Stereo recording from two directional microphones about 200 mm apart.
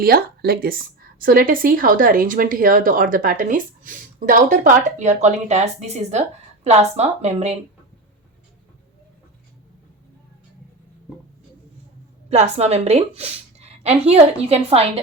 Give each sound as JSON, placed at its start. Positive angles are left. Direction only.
{"t": 0.0, "sound": "a woman's voice", "side_deg": -50}
{"t": 12.3, "sound": "a woman's voice", "side_deg": -30}